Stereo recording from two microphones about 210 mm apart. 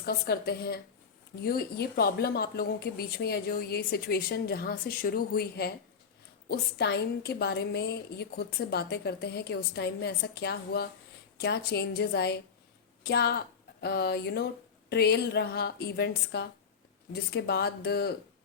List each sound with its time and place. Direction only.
0.0 s a woman's voice: 50° left (ahead or behind)